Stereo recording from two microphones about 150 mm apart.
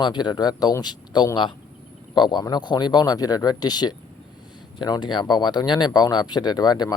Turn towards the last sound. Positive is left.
turn(degrees=25)  # may be behind; listen again after turning